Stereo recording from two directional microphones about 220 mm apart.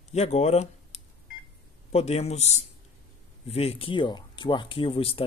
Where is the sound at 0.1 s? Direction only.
30° left (ahead or behind).